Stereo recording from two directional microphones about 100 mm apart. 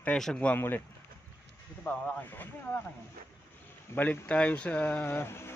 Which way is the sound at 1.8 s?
15° left (ahead or behind).